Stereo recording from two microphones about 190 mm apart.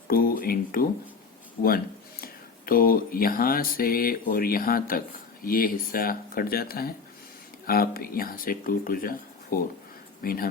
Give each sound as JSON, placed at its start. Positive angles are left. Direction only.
{"t": 0.1, "sound": "mantra", "side_deg": 50}
{"t": 2.2, "sound": "mantra", "side_deg": 50}